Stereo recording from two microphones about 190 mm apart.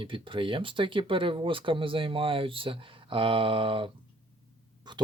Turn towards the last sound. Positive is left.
turn(degrees=-25)  # may be behind; listen again after turning